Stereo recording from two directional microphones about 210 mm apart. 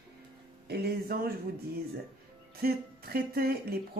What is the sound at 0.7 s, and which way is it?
Speech, 50° right (ahead or behind).